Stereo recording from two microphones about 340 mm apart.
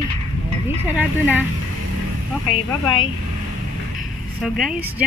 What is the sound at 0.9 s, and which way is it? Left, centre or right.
Speech, centre.